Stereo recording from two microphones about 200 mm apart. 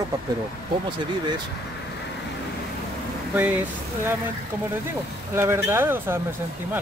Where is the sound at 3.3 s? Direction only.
10° right (ahead or behind).